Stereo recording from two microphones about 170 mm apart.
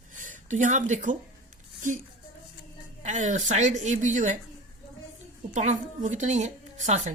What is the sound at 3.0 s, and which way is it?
Speech, 45° right (ahead or behind).